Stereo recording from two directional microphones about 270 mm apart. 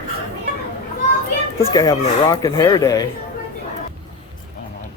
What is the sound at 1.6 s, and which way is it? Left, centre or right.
A man's voice, centre.